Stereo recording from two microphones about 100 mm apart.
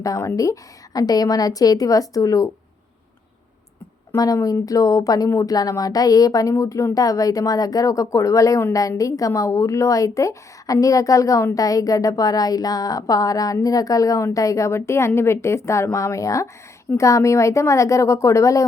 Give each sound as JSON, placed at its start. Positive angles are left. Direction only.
{"t": 0.0, "sound": "a woman's voice", "side_deg": 30}
{"t": 4.1, "sound": "a woman's voice", "side_deg": 35}